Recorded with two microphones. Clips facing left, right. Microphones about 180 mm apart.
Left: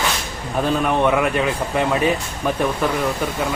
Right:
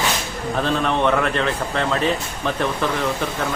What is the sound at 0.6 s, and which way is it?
Speech, 10° left (ahead or behind).